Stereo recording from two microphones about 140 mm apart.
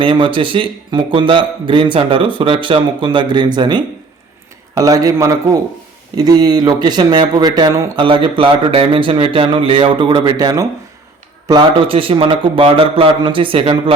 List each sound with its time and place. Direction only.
0.0 s a man's voice: 35° right (ahead or behind)
11.4 s speech: 35° right (ahead or behind)